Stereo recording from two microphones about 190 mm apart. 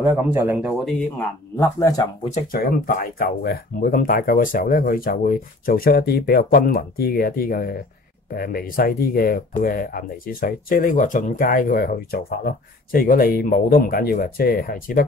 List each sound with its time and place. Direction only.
0.0 s speech: 10° right (ahead or behind); by 2.0 s 15° left (ahead or behind)
2.3 s speech: 50° left (ahead or behind)